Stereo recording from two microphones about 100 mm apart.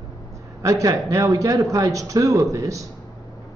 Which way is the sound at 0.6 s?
35° right (ahead or behind).